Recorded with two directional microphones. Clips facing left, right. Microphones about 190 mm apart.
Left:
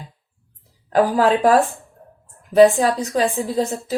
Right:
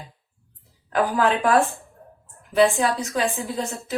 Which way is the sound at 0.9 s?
35° left (ahead or behind).